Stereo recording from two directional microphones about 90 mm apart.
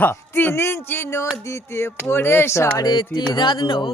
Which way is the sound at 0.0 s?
20° left (ahead or behind).